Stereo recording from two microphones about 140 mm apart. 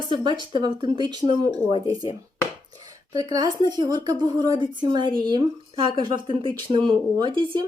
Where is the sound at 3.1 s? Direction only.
25° right (ahead or behind).